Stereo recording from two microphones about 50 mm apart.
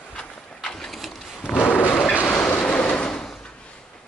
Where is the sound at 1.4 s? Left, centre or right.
Left.